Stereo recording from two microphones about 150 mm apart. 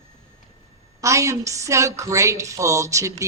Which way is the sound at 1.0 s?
20° right (ahead or behind).